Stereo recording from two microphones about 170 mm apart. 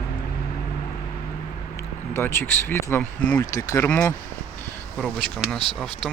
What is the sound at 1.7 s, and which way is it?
Speech, 15° left (ahead or behind).